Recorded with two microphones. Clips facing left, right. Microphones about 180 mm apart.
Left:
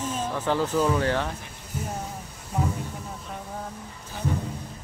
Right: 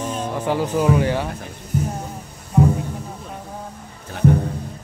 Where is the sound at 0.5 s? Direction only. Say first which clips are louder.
Right 4 dB; 15° right (ahead or behind).